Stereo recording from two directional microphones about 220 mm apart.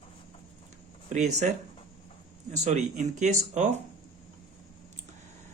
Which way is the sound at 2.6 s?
30° right (ahead or behind).